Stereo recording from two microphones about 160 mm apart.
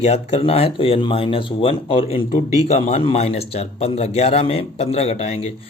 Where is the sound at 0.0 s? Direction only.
40° left (ahead or behind).